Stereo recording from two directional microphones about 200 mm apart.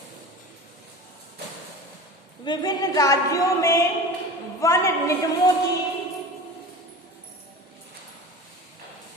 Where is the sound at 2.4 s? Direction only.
20° left (ahead or behind).